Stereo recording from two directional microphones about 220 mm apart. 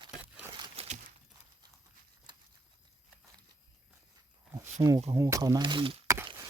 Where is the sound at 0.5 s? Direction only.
25° right (ahead or behind).